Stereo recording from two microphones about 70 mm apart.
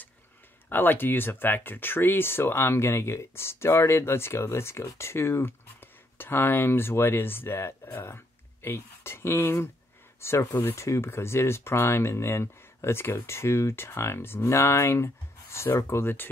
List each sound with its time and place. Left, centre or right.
0.7 s speech: left